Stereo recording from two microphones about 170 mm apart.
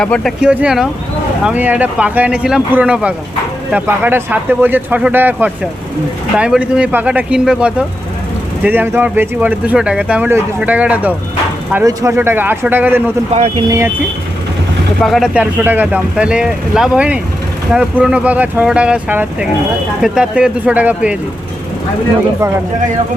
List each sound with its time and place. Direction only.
0.0 s speech: 5° left (ahead or behind)
13.3 s speech: 40° right (ahead or behind)
13.7 s speech: 15° right (ahead or behind)
15.0 s speech: centre (ahead or behind)